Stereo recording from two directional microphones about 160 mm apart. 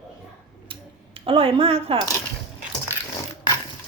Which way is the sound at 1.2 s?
35° right (ahead or behind).